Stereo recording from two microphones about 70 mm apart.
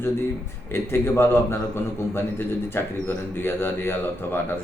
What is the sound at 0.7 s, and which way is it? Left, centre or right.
A man's voice, left.